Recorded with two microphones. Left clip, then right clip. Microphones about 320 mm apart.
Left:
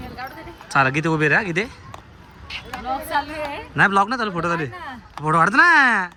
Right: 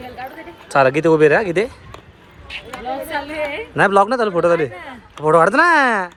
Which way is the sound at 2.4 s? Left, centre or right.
Centre.